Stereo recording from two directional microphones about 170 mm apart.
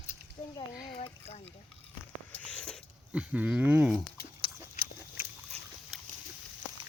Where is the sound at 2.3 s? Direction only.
5° left (ahead or behind).